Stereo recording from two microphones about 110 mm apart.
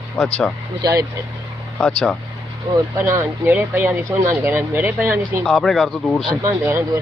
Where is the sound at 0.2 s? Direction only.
5° left (ahead or behind).